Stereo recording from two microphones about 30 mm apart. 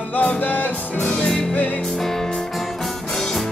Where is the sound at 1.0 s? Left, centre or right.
Centre.